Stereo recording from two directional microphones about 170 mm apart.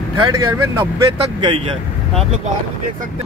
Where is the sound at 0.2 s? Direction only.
25° right (ahead or behind).